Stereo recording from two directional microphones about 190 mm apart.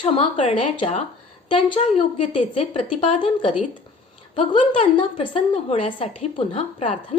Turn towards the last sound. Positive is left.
turn(degrees=30)  # may be behind; listen again after turning